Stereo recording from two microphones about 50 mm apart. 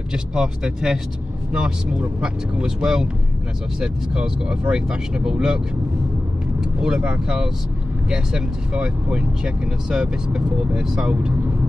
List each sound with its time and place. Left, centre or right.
0.1 s speech: centre
6.8 s speech: centre